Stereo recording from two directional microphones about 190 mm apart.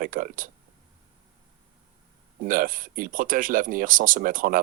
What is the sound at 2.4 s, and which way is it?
Speech, 45° right (ahead or behind).